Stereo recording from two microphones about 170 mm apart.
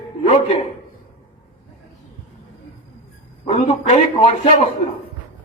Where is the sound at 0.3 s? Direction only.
35° left (ahead or behind).